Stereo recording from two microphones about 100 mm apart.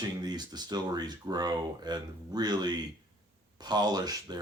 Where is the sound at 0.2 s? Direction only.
45° right (ahead or behind).